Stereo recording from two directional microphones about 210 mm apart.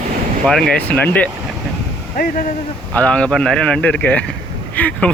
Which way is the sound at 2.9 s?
5° left (ahead or behind).